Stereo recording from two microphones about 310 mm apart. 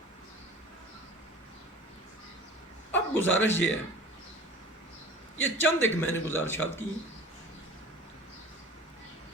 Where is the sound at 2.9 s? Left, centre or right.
Left.